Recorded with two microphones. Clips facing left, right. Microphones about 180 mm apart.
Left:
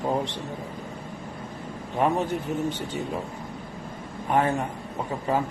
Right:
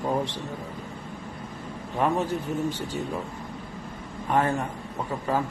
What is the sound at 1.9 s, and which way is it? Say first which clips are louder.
Speech: left 1 dB; 20° left (ahead or behind).